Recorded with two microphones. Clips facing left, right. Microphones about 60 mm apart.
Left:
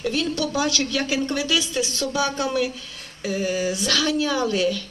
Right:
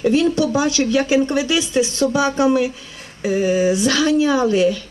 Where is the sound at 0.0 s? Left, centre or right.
Right.